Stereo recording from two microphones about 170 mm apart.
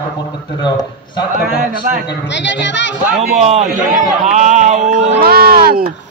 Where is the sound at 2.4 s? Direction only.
90° left.